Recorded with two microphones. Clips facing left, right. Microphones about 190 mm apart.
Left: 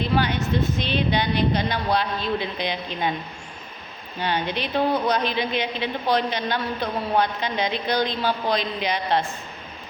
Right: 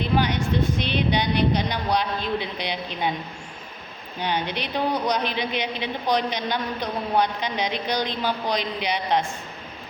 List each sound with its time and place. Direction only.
0.0 s a man's voice: 15° right (ahead or behind)
4.2 s a man's voice: 15° right (ahead or behind)